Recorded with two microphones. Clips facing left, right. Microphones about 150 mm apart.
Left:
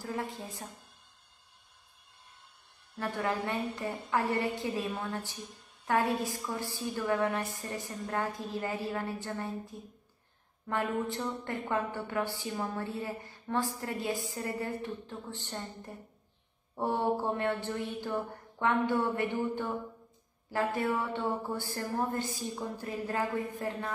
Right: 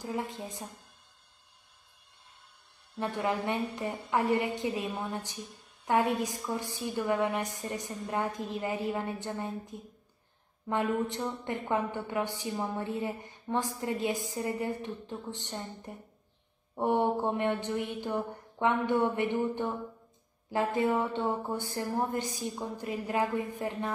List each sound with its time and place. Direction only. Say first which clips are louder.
0.0 s a woman's voice: right 2 dB; 20° right (ahead or behind)
3.0 s a woman's voice: right 2 dB; 20° right (ahead or behind)